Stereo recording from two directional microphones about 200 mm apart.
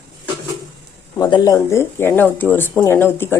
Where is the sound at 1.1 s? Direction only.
20° left (ahead or behind).